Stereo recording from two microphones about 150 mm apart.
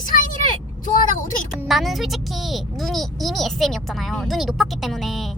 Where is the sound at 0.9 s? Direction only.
65° left (ahead or behind).